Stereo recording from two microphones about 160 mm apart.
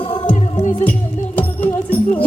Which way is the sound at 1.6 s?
10° left (ahead or behind).